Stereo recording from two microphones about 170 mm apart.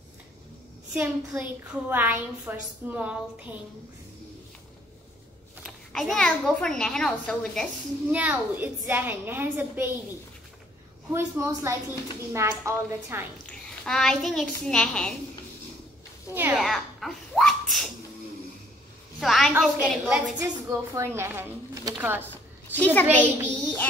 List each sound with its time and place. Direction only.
0.9 s a woman's voice: 10° right (ahead or behind)
5.6 s a woman's voice: centre (ahead or behind)
8.1 s a woman's voice: 10° right (ahead or behind)
11.1 s a woman's voice: 15° right (ahead or behind)
13.5 s a child's voice: centre (ahead or behind)
16.5 s speech: centre (ahead or behind)
19.1 s a woman's voice: centre (ahead or behind)
20.3 s a woman's voice: 15° right (ahead or behind)
22.3 s a sound: 10° left (ahead or behind)
23.4 s child singing: 10° left (ahead or behind)